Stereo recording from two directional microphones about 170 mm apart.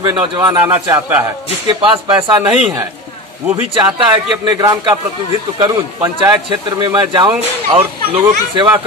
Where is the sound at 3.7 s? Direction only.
30° right (ahead or behind).